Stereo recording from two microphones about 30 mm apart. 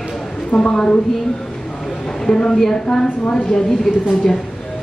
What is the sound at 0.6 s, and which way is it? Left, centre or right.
Speech, left.